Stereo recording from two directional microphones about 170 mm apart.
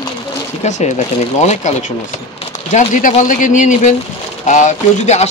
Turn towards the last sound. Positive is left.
turn(degrees=45)  # may be behind; listen again after turning